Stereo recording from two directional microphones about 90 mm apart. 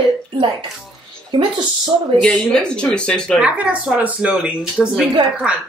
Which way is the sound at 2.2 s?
10° left (ahead or behind).